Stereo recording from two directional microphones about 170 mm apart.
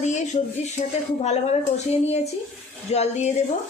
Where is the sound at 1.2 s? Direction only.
40° left (ahead or behind).